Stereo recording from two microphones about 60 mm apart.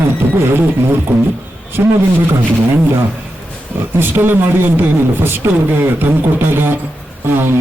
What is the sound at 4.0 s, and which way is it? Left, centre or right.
Speech, right.